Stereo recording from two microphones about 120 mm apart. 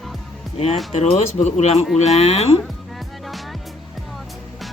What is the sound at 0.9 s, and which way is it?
Speech, 60° left (ahead or behind).